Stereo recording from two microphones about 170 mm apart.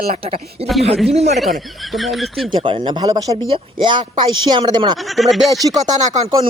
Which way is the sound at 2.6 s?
30° right (ahead or behind).